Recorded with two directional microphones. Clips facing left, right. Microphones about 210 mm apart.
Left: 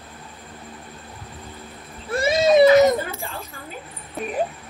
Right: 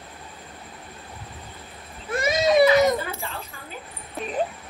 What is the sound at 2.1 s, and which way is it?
Baby cry, 30° left (ahead or behind).